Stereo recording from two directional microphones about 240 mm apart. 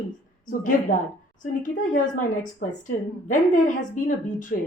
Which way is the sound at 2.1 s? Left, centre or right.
Left.